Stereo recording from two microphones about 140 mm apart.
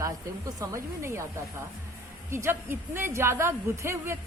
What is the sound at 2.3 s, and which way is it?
A woman's voice, 20° right (ahead or behind).